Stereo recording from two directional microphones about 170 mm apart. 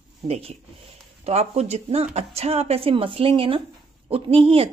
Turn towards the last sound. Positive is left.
turn(degrees=-35)  # may be behind; listen again after turning